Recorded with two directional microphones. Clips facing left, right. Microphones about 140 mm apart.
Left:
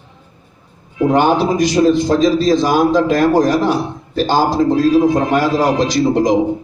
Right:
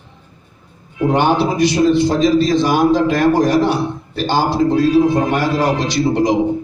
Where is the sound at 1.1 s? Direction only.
45° left (ahead or behind).